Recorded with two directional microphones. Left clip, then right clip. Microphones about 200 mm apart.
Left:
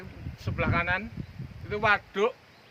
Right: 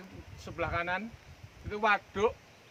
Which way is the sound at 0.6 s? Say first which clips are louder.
Left 5 dB; 40° left (ahead or behind).